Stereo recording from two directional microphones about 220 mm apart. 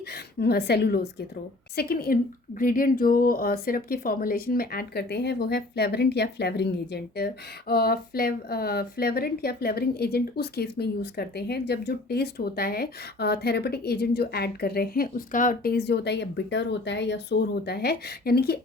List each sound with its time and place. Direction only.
0.3 s speech: 45° left (ahead or behind)